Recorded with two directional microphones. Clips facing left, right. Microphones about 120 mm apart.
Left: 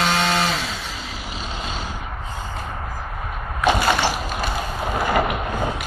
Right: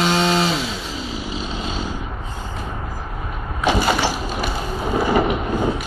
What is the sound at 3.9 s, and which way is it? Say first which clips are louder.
Thump: even; centre (ahead or behind).